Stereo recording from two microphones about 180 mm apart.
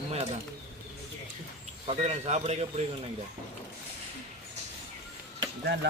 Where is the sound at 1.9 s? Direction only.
35° right (ahead or behind).